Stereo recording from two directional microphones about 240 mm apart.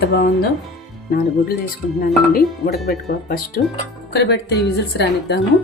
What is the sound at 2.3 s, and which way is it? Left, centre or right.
Speech, left.